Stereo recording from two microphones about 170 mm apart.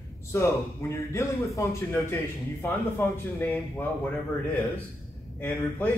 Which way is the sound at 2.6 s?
20° left (ahead or behind).